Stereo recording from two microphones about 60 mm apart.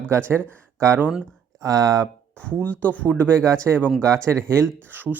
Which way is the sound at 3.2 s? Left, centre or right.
Right.